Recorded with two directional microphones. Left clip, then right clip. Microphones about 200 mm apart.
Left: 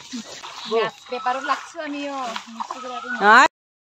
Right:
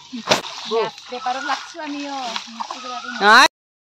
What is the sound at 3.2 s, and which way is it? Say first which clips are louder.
Speech: right 2 dB; 5° right (ahead or behind).